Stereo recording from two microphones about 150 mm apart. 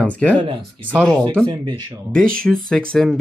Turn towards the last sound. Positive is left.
turn(degrees=5)  # may be behind; listen again after turning